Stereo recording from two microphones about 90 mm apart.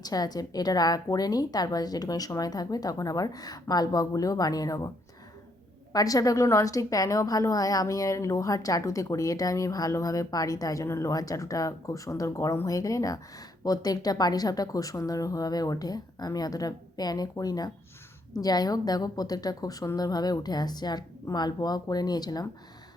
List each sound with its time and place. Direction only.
0.0 s a woman's voice: 45° left (ahead or behind)
5.9 s a woman's voice: 40° left (ahead or behind)